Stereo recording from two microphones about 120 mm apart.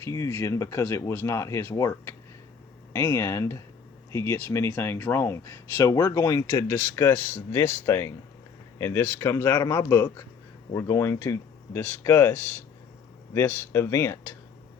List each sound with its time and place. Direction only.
0.0 s speech: 25° left (ahead or behind)